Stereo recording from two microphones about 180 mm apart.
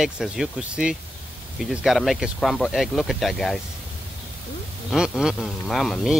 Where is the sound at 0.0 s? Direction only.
5° right (ahead or behind).